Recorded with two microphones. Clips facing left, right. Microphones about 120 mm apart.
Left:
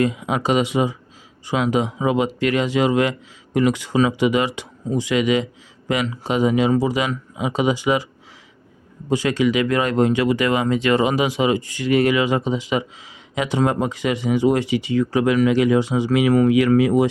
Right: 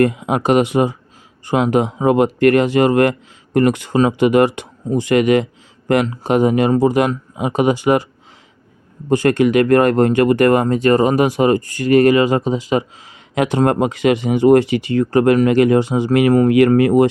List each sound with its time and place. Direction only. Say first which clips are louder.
0.0 s speech: right 5 dB; 55° right (ahead or behind)
9.0 s speech: right 5 dB; 50° right (ahead or behind)
13.3 s speech: right 5 dB; 60° right (ahead or behind)